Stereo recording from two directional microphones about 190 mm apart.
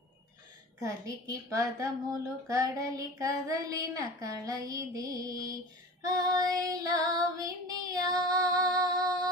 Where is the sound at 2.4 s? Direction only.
20° right (ahead or behind).